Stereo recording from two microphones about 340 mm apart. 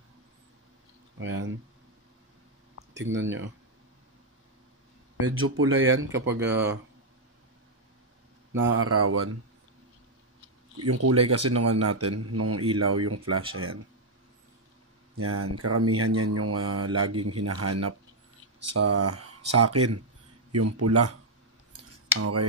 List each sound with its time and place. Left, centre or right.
1.2 s speech: right
3.2 s speech: right
5.2 s speech: right
8.7 s speech: right
10.8 s a man's voice: right
15.1 s a man's voice: right